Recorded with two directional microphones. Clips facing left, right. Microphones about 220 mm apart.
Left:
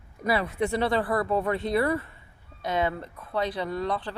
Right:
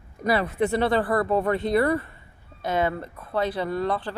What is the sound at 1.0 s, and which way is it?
Speech, 50° right (ahead or behind).